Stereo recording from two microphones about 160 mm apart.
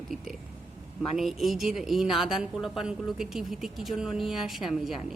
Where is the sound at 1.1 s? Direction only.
Centre (ahead or behind).